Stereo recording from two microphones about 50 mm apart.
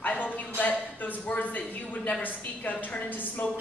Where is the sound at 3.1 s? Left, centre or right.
Left.